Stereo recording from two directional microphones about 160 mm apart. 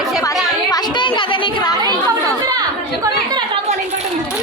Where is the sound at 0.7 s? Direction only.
25° left (ahead or behind).